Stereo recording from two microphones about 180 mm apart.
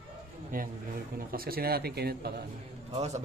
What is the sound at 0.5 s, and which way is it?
A man's voice, 50° right (ahead or behind).